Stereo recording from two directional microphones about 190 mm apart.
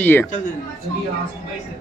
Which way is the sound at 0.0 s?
10° left (ahead or behind).